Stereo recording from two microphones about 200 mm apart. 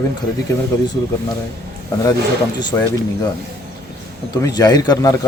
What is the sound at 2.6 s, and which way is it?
Speech, 20° left (ahead or behind).